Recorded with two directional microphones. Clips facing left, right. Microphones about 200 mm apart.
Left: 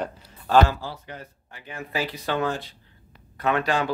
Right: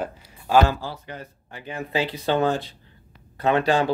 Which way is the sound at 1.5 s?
25° right (ahead or behind).